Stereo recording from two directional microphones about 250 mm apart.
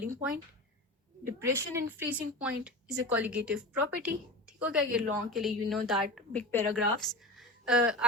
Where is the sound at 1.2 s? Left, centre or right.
Centre.